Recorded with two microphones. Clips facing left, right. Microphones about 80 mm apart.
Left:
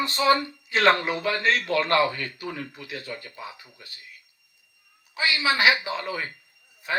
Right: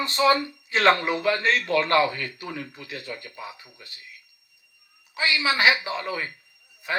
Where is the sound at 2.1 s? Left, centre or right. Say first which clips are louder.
Left 1 dB; left.